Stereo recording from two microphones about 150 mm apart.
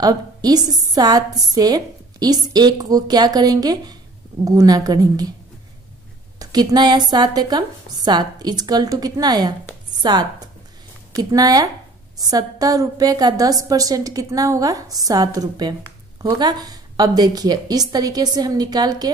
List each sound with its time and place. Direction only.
0.0 s a woman's voice: 25° right (ahead or behind)
6.4 s a woman's voice: 25° right (ahead or behind)